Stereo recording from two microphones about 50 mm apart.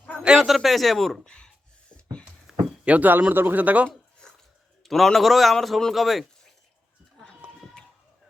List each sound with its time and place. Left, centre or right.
0.3 s a man's voice: centre
1.2 s speech: centre
2.5 s a sound: centre
2.8 s speech: right
4.2 s a sound: centre
4.8 s a man's voice: centre